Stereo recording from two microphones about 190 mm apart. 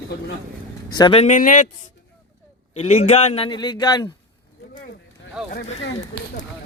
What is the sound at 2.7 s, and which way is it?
A man's voice, 35° left (ahead or behind).